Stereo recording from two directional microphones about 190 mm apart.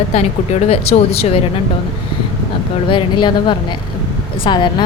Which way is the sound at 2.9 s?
25° left (ahead or behind).